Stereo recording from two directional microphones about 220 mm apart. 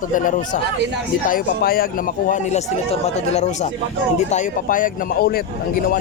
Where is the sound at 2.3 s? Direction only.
30° left (ahead or behind).